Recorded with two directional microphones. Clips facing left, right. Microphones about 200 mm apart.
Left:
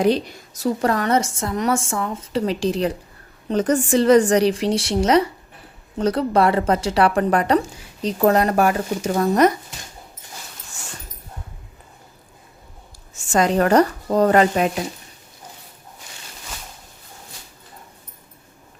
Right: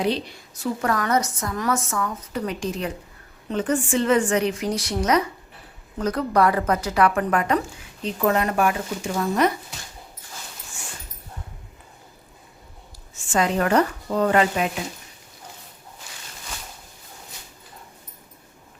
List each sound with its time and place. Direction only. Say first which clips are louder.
0.0 s a woman's voice: left 6 dB; 45° left (ahead or behind)
13.1 s a woman's voice: left 4 dB; 45° left (ahead or behind)